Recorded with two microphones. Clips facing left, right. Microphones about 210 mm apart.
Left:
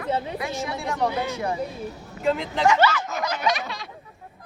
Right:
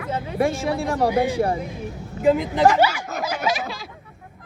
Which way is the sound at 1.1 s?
15° right (ahead or behind).